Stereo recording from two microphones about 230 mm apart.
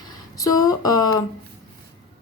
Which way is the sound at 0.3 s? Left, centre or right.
Centre.